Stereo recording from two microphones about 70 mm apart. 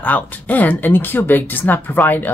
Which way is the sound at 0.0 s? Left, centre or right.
Left.